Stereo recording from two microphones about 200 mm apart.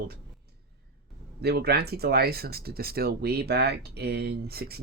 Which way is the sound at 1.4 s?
55° right (ahead or behind).